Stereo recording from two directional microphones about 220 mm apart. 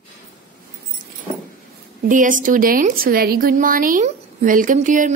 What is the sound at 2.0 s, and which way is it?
A woman's voice, 35° right (ahead or behind).